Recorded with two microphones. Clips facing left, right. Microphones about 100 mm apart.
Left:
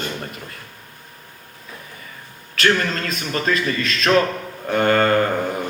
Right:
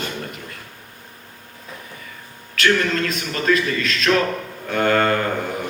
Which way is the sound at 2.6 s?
40° left (ahead or behind).